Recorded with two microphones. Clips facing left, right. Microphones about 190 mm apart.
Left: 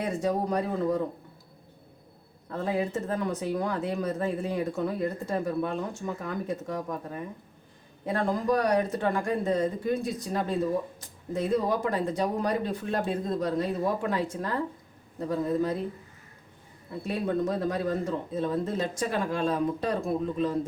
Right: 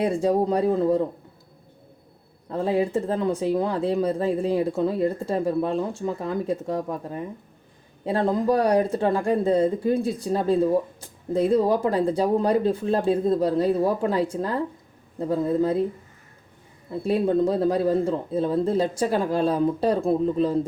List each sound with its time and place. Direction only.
0.0 s speech: 30° right (ahead or behind)
2.5 s speech: 30° right (ahead or behind)
17.1 s speech: 30° right (ahead or behind)